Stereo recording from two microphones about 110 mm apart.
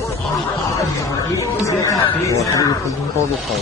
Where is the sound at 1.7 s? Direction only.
30° left (ahead or behind).